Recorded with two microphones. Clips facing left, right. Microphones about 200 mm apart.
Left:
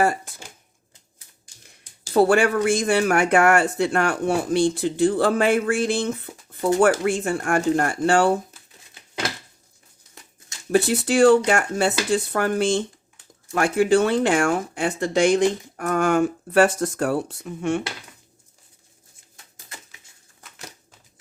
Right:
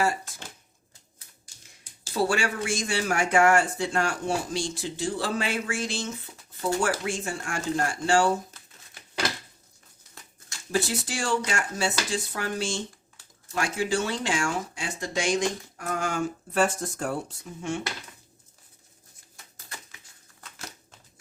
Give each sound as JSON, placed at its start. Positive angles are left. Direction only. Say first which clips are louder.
{"t": 0.0, "sound": "speech", "louder": "left 5 dB", "side_deg": 55}
{"t": 2.1, "sound": "speech", "louder": "left 9 dB", "side_deg": 55}
{"t": 10.7, "sound": "speech", "louder": "left 9 dB", "side_deg": 60}